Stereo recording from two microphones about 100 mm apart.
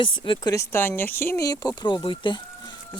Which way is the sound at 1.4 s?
40° left (ahead or behind).